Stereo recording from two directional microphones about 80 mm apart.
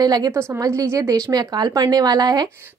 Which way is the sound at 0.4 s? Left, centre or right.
Right.